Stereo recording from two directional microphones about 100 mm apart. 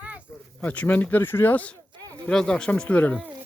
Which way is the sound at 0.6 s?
15° left (ahead or behind).